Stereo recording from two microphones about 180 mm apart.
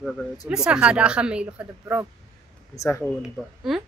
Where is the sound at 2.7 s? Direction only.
15° left (ahead or behind).